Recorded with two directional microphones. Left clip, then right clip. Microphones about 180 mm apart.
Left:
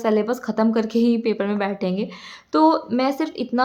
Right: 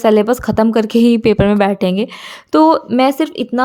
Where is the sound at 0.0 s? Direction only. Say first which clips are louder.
Right 9 dB; 55° right (ahead or behind).